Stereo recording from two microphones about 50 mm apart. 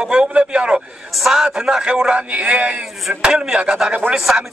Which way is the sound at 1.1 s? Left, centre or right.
Centre.